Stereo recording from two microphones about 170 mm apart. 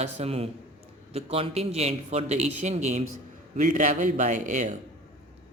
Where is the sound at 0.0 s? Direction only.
35° right (ahead or behind).